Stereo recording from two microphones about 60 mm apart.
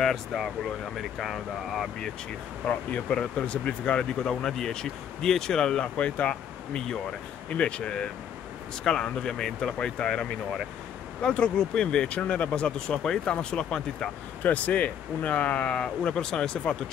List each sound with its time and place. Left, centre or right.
0.0 s speech: centre
2.6 s speech: left
11.2 s speech: centre
14.4 s speech: left